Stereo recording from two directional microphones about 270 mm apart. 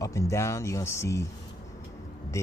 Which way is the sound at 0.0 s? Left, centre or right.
Centre.